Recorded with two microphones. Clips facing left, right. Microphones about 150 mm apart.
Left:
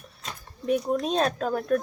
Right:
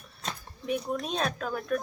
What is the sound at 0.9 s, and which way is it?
Speech, 35° left (ahead or behind).